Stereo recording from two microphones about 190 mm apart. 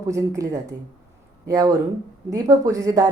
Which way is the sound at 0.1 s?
15° right (ahead or behind).